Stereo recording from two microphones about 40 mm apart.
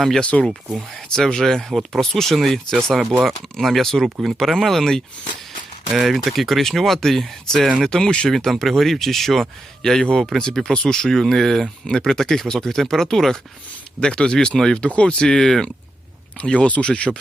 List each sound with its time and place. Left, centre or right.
0.2 s speech: left
1.1 s speech: centre
1.7 s speech: centre
5.9 s speech: centre
8.4 s speech: centre
14.0 s speech: left
16.4 s speech: left